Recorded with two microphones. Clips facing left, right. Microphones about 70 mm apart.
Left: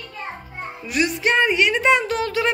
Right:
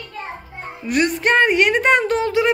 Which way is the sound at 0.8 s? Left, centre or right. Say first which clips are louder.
Right 3 dB; right.